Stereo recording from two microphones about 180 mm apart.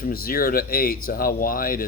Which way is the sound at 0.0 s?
55° left (ahead or behind).